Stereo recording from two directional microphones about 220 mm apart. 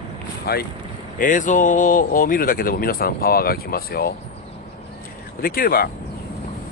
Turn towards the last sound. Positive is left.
turn(degrees=40)  # may be behind; listen again after turning